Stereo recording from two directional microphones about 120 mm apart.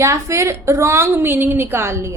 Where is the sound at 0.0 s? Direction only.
25° right (ahead or behind).